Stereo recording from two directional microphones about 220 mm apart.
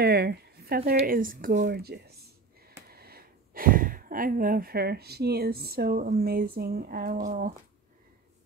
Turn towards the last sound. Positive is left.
turn(degrees=-35)  # may be behind; listen again after turning